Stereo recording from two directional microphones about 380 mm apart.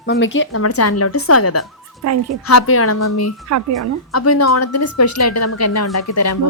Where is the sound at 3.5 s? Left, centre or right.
Right.